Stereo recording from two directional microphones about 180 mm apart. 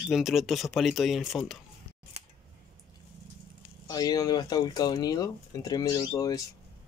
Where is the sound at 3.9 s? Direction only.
20° left (ahead or behind).